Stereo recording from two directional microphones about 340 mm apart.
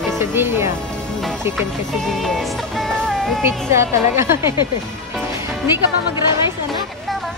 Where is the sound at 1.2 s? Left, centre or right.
Centre.